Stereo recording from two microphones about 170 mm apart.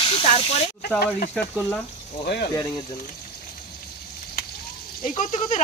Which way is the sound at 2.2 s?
70° left (ahead or behind).